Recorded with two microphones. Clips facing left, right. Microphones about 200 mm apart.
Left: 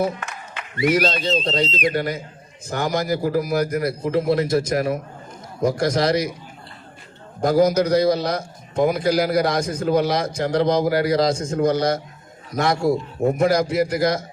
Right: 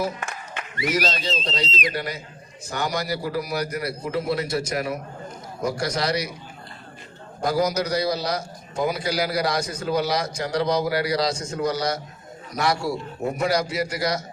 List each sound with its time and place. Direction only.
0.9 s a man's voice: 55° left (ahead or behind)
7.4 s a man's voice: 50° left (ahead or behind)